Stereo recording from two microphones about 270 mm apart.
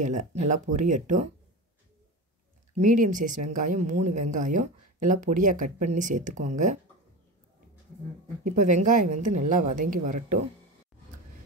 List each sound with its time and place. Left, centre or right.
0.0 s speech: right
2.8 s speech: right
8.5 s speech: right